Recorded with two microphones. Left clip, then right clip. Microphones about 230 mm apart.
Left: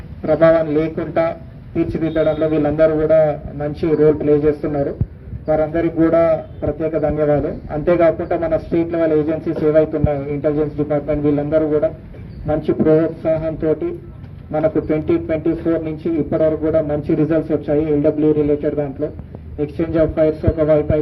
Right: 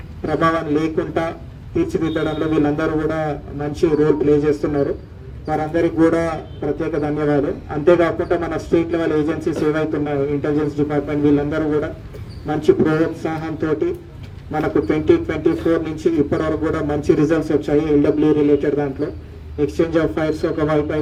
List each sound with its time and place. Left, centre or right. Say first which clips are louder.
0.3 s a man's voice: left 5 dB; right